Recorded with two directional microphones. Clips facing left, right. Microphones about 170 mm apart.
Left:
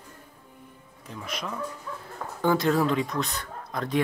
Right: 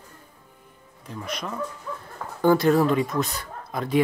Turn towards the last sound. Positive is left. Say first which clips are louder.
# right 3 dB
turn(degrees=-5)  # may be behind; listen again after turning